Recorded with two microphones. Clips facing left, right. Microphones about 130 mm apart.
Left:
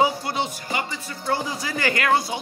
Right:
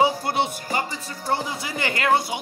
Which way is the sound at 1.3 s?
25° right (ahead or behind).